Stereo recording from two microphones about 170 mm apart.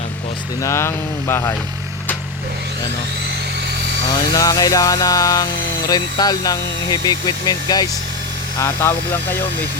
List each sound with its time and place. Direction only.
0.6 s speech: 15° left (ahead or behind)
4.4 s speech: 20° left (ahead or behind)